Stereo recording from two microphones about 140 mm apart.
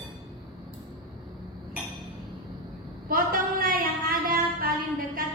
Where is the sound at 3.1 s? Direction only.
90° right.